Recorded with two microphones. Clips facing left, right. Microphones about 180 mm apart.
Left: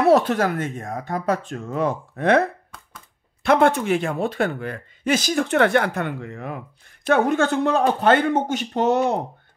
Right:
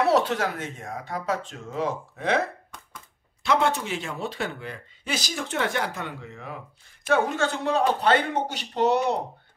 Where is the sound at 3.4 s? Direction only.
55° left (ahead or behind).